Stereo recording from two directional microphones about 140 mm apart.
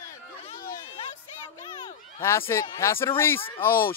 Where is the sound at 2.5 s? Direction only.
20° left (ahead or behind).